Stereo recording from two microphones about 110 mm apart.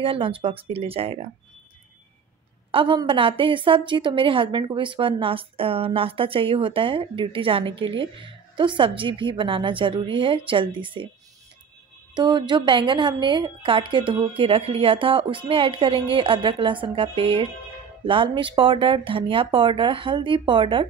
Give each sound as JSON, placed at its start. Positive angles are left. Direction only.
{"t": 0.0, "sound": "speech", "side_deg": -55}
{"t": 2.7, "sound": "a woman's voice", "side_deg": -50}
{"t": 12.1, "sound": "a woman's voice", "side_deg": -40}